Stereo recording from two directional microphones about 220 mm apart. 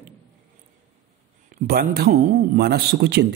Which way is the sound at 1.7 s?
45° right (ahead or behind).